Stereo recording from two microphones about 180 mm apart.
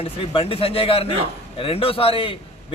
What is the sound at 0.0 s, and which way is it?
A man's voice, 30° left (ahead or behind).